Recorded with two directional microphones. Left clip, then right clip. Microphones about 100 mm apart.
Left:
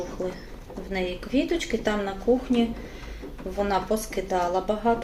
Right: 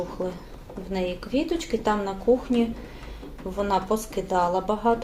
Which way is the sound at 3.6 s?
25° right (ahead or behind).